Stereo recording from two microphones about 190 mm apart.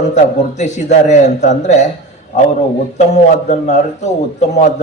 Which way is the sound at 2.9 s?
40° left (ahead or behind).